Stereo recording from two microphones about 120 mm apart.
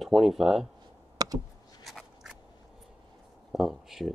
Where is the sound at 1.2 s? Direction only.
30° right (ahead or behind).